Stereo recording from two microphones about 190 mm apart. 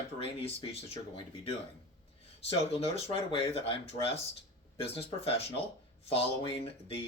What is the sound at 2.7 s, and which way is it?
Speech, 30° left (ahead or behind).